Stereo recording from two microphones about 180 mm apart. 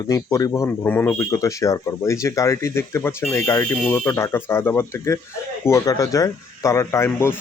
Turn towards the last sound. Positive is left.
turn(degrees=15)  # may be behind; listen again after turning